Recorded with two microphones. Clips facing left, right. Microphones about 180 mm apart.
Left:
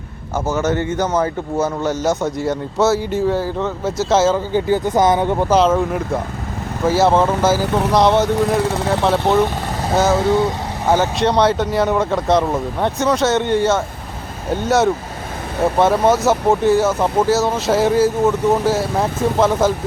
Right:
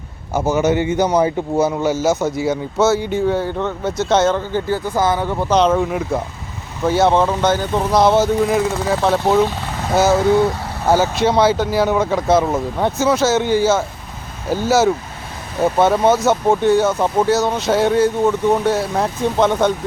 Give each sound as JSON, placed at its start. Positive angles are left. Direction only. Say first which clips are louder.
{"t": 0.3, "sound": "speech", "louder": "right 3 dB", "side_deg": -10}
{"t": 4.5, "sound": "speech", "louder": "left 3 dB", "side_deg": 20}
{"t": 5.5, "sound": "speech", "louder": "right 2 dB", "side_deg": 0}
{"t": 10.8, "sound": "speech", "louder": "right 1 dB", "side_deg": -5}